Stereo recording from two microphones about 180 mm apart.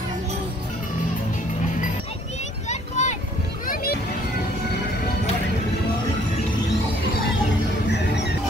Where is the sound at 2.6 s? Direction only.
40° left (ahead or behind).